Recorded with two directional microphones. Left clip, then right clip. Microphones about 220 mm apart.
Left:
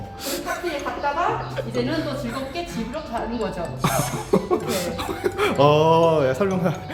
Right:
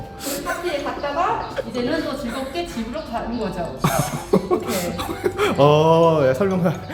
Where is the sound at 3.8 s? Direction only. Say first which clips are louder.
Right 1 dB; centre (ahead or behind).